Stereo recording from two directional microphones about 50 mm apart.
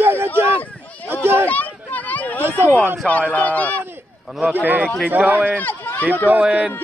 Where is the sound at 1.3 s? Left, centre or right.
Left.